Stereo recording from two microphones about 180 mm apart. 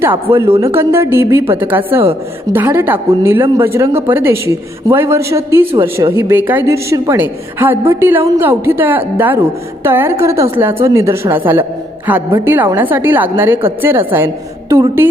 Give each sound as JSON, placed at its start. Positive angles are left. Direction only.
{"t": 0.0, "sound": "speech", "side_deg": -15}